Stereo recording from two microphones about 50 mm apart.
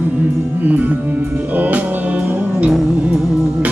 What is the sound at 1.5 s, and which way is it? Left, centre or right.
Music, right.